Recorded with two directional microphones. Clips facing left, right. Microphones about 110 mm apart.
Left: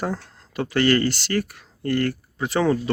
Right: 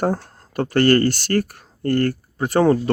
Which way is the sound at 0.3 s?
45° right (ahead or behind).